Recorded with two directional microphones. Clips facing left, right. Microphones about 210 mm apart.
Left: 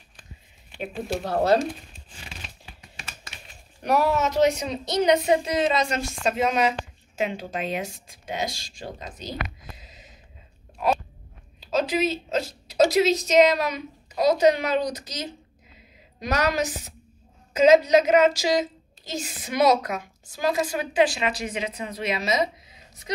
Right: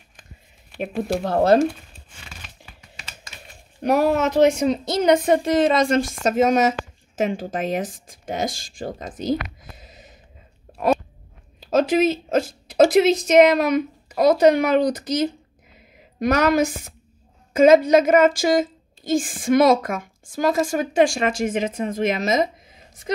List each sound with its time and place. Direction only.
0.7 s a woman's voice: 55° right (ahead or behind)
3.8 s a woman's voice: 50° right (ahead or behind)
11.6 s a woman's voice: 50° right (ahead or behind)